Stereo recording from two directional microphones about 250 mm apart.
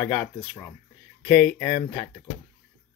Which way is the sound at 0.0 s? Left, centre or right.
Centre.